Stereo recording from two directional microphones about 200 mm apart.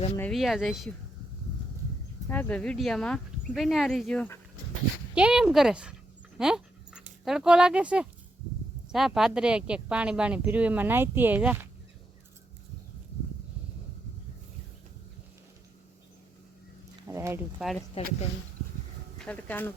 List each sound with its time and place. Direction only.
0.2 s speech: centre (ahead or behind)
2.3 s speech: 5° left (ahead or behind)
5.1 s speech: 5° right (ahead or behind)
6.3 s dog: 5° right (ahead or behind)
7.3 s speech: 5° right (ahead or behind)
17.1 s speech: 15° right (ahead or behind)
18.0 s speech: 30° left (ahead or behind)
19.2 s speech: 5° left (ahead or behind)